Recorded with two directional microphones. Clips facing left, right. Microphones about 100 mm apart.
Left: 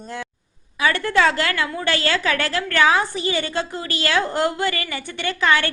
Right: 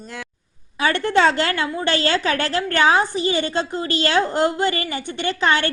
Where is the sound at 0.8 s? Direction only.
30° right (ahead or behind).